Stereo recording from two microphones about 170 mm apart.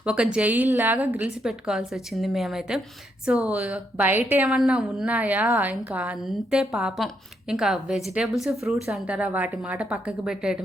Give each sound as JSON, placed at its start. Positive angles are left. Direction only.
{"t": 0.0, "sound": "a woman's voice", "side_deg": -5}